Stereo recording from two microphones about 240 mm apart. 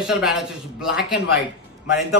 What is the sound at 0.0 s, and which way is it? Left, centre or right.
Speech, centre.